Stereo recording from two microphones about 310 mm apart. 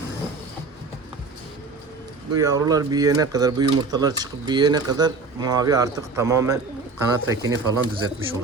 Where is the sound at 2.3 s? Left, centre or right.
Centre.